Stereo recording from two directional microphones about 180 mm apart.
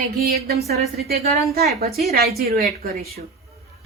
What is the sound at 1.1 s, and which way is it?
Speech, 60° right (ahead or behind).